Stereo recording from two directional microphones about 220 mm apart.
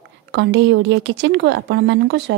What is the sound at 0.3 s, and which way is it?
Speech, 55° right (ahead or behind).